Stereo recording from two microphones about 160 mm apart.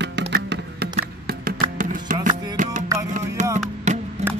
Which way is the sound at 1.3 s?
65° right (ahead or behind).